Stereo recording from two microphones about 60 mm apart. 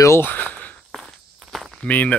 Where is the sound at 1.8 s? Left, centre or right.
Left.